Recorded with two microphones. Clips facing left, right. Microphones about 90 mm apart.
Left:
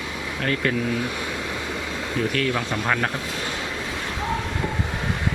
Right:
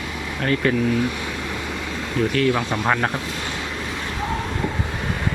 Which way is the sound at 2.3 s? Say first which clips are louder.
Right 4 dB; 20° right (ahead or behind).